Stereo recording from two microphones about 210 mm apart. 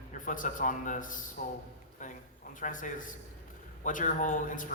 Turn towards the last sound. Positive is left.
turn(degrees=40)  # may be behind; listen again after turning